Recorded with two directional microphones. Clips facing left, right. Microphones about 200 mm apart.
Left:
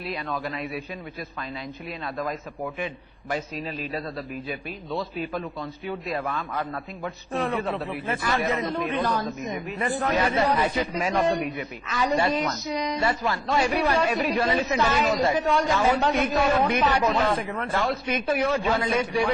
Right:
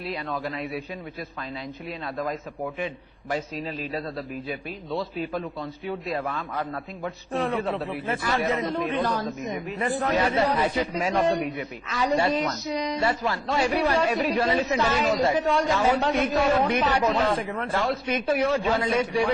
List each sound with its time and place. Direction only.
0.1 s a man's voice: 30° right (ahead or behind)
1.9 s a man's voice: 30° right (ahead or behind)